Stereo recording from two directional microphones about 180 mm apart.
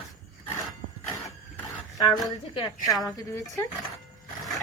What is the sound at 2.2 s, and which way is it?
Speech, 25° left (ahead or behind).